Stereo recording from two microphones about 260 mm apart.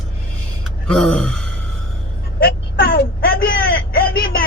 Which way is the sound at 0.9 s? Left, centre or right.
Centre.